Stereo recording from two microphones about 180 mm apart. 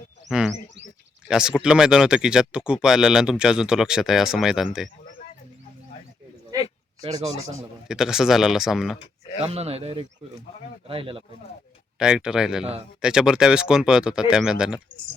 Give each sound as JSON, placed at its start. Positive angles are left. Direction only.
{"t": 0.3, "sound": "a sound", "side_deg": -5}
{"t": 1.3, "sound": "speech", "side_deg": -5}
{"t": 7.0, "sound": "a man's voice", "side_deg": -30}
{"t": 7.9, "sound": "speech", "side_deg": -5}
{"t": 9.4, "sound": "a man's voice", "side_deg": -35}
{"t": 11.9, "sound": "speech", "side_deg": -5}